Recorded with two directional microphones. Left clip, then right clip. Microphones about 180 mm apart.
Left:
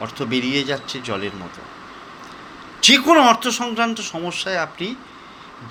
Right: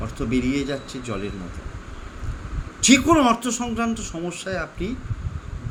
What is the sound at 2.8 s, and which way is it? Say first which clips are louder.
A man's voice: left 5 dB; 30° right (ahead or behind).